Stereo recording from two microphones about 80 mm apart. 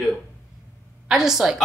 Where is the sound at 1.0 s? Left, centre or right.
Centre.